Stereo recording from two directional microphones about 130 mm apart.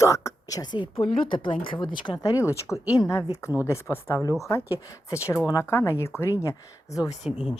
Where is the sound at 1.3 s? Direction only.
40° left (ahead or behind); by 6.7 s 25° left (ahead or behind).